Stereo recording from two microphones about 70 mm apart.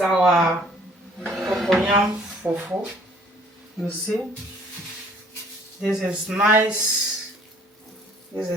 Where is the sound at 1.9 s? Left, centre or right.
Right.